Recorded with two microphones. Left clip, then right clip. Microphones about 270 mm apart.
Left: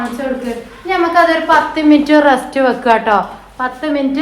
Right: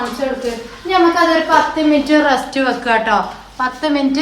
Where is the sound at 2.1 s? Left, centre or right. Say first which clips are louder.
Left 3 dB; left.